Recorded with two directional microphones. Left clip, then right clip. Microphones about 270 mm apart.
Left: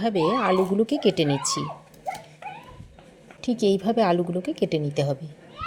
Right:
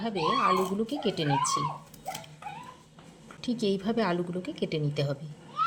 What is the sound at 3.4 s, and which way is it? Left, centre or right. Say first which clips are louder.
A woman's voice: left 7 dB; centre.